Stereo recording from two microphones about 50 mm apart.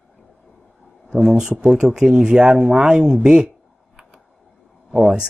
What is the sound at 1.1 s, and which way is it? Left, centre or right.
Speech, centre.